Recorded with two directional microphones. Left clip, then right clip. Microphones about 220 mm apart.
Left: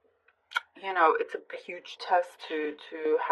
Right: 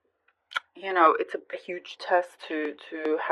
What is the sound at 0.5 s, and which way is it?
Speech, 40° right (ahead or behind).